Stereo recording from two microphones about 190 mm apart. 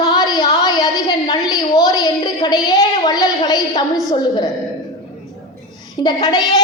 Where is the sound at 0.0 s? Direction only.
20° left (ahead or behind).